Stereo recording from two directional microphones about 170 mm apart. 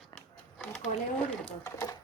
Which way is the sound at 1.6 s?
20° left (ahead or behind).